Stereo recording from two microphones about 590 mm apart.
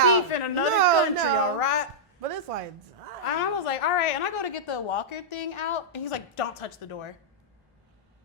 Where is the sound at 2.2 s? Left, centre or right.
Right.